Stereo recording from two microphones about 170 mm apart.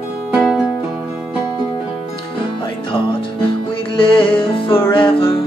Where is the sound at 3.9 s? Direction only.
30° left (ahead or behind).